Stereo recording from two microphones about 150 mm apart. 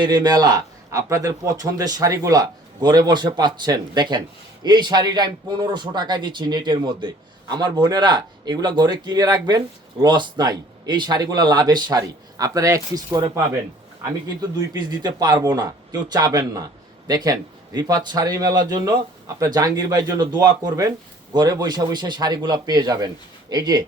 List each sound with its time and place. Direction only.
0.0 s a man's voice: 30° right (ahead or behind)
14.7 s a man's voice: 25° right (ahead or behind)